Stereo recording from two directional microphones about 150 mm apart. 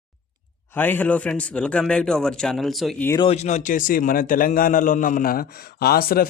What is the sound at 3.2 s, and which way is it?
A man's voice, 45° left (ahead or behind).